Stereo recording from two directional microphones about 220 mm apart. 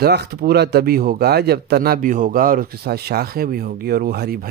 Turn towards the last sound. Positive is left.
turn(degrees=-45)  # may be behind; listen again after turning